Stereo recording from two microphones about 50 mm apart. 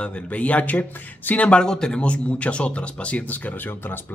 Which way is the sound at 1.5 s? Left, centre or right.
Centre.